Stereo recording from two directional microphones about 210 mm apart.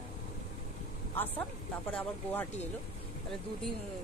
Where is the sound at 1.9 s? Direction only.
10° left (ahead or behind).